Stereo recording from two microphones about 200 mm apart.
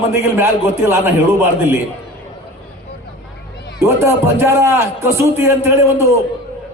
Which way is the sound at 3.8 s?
15° right (ahead or behind).